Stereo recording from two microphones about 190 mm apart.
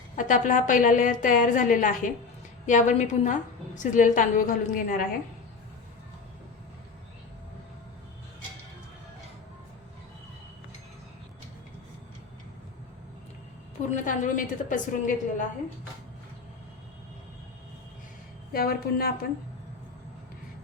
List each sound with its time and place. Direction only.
0.2 s a woman's voice: 40° left (ahead or behind)
13.9 s a woman's voice: 45° left (ahead or behind)
18.5 s a woman's voice: 50° left (ahead or behind)